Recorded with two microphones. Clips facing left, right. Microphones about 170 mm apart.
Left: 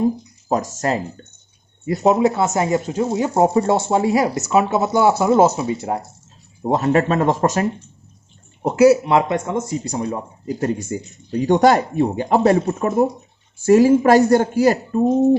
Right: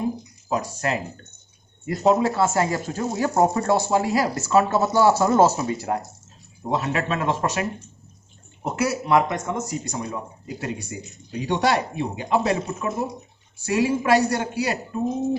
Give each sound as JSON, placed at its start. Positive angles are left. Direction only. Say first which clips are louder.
{"t": 0.4, "sound": "speech", "louder": "left 5 dB", "side_deg": 45}
{"t": 1.9, "sound": "speech", "louder": "left 4 dB", "side_deg": 20}
{"t": 6.7, "sound": "speech", "louder": "left 8 dB", "side_deg": 45}
{"t": 8.6, "sound": "speech", "louder": "left 12 dB", "side_deg": 30}